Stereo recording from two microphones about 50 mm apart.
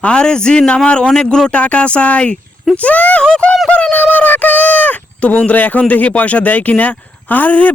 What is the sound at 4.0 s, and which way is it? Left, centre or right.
Speech, left.